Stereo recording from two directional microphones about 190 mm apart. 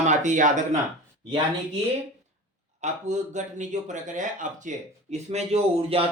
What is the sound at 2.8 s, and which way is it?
A man's voice, 40° right (ahead or behind).